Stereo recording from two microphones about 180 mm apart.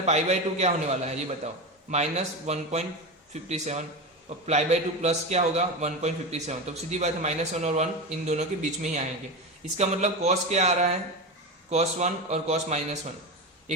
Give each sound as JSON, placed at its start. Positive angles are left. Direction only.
{"t": 0.0, "sound": "a man's voice", "side_deg": -40}